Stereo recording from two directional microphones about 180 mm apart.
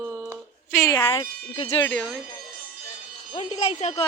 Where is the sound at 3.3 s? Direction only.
25° left (ahead or behind).